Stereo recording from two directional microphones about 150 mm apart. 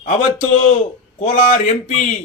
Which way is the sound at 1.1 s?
55° left (ahead or behind).